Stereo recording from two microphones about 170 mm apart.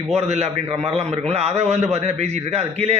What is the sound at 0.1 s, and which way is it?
A man's voice, 40° right (ahead or behind).